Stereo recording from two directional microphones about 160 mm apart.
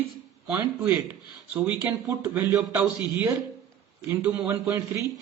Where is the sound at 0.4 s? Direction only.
15° right (ahead or behind).